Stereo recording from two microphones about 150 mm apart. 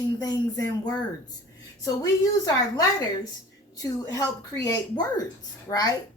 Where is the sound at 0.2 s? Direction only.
25° left (ahead or behind).